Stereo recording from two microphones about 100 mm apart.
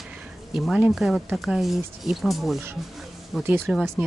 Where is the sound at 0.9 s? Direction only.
Centre (ahead or behind).